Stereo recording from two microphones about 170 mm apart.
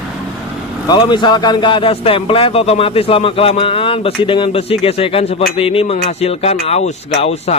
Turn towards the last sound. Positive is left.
turn(degrees=40)  # may be behind; listen again after turning